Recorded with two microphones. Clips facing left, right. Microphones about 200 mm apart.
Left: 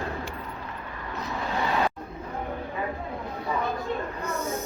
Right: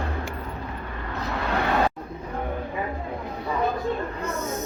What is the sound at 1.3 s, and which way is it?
Vehicle, 65° right (ahead or behind).